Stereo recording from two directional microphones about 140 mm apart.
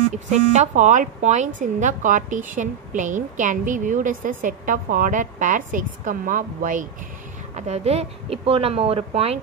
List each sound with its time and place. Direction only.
0.1 s a woman's voice: 55° right (ahead or behind)
7.5 s a woman's voice: 50° right (ahead or behind)